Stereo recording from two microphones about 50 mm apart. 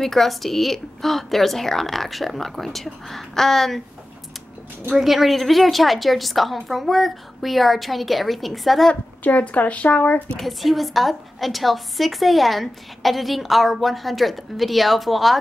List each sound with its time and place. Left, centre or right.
0.0 s a woman's voice: centre
4.9 s a woman's voice: centre
9.2 s speech: left
10.4 s a woman's voice: centre